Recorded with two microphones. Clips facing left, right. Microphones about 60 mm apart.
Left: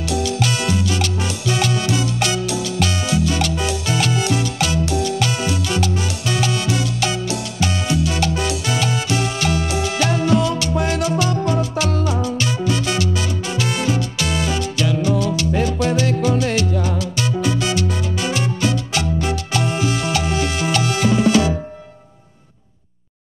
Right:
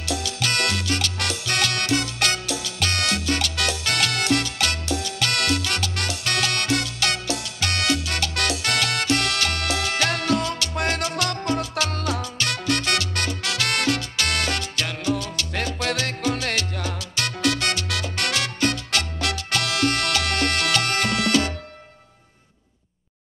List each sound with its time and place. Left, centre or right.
0.1 s music: centre
0.5 s music: right
2.4 s music: centre
2.9 s salsa music: right
3.5 s music: right
4.8 s music: centre
5.3 s music: right
11.3 s music: centre
11.9 s music: right
15.0 s music: centre
15.5 s salsa music: right
16.3 s music: right
17.8 s music: right